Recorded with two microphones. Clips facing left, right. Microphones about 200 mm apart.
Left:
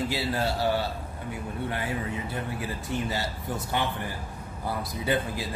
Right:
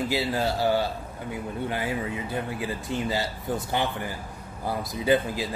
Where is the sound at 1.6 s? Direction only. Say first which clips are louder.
Right 2 dB; 20° right (ahead or behind).